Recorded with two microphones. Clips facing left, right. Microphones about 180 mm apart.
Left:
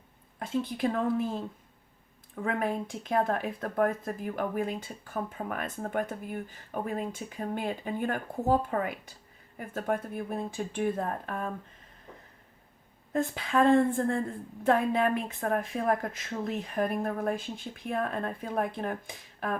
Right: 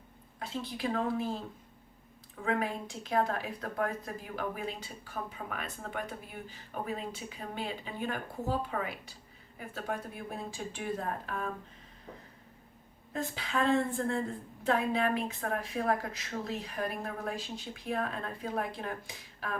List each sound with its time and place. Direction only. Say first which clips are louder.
0.3 s speech: left 7 dB; 50° left (ahead or behind)
2.4 s speech: left 3 dB; 50° left (ahead or behind)
13.1 s speech: left 7 dB; 50° left (ahead or behind)